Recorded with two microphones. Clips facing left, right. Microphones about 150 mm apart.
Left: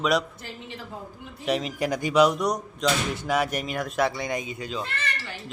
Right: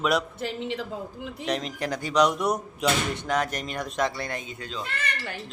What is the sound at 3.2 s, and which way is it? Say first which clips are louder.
Speech: left 2 dB; 10° left (ahead or behind).